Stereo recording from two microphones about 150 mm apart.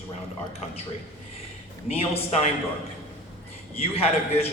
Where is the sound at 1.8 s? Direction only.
40° left (ahead or behind).